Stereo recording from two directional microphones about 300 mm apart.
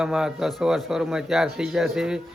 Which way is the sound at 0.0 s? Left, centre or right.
Centre.